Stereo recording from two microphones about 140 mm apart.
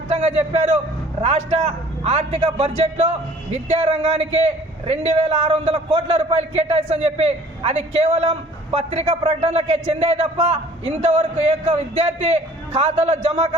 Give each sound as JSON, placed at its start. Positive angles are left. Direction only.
{"t": 0.1, "sound": "a man's voice", "side_deg": -50}